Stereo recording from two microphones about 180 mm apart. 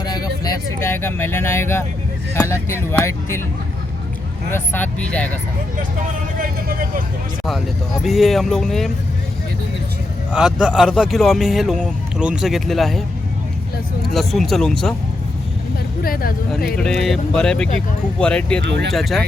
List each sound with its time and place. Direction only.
0.0 s speech: 20° left (ahead or behind)
4.5 s speech: 10° left (ahead or behind)
6.4 s speech: 55° right (ahead or behind)
7.4 s speech: centre (ahead or behind)
10.3 s speech: 5° right (ahead or behind)
14.1 s speech: centre (ahead or behind)
16.0 s speech: 55° left (ahead or behind)
16.7 s speech: 5° left (ahead or behind)